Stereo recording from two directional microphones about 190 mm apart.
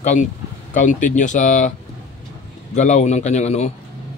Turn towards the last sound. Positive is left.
turn(degrees=35)  # may be behind; listen again after turning